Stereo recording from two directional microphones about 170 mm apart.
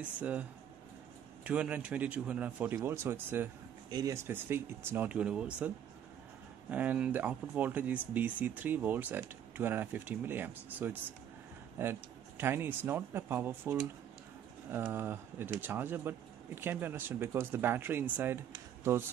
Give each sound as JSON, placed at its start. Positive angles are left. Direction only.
{"t": 0.0, "sound": "speech", "side_deg": -10}
{"t": 6.7, "sound": "speech", "side_deg": -10}